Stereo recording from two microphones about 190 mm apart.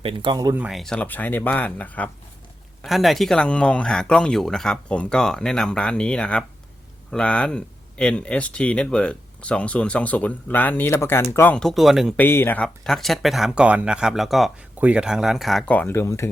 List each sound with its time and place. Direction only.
0.0 s speech: 25° right (ahead or behind)
0.6 s speech: centre (ahead or behind)
12.2 s speech: 10° left (ahead or behind)